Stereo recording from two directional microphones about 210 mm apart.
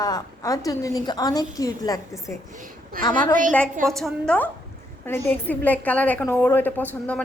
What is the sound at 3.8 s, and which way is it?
A woman's voice, centre (ahead or behind).